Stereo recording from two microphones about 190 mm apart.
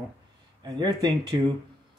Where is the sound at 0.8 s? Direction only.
20° right (ahead or behind).